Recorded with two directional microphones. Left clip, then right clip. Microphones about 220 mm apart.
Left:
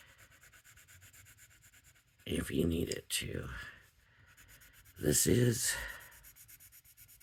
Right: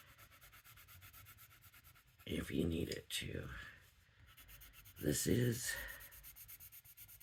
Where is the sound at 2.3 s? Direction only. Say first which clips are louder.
Left 6 dB; 50° left (ahead or behind).